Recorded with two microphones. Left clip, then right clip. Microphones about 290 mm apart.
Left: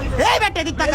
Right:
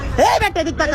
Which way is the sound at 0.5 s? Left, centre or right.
Centre.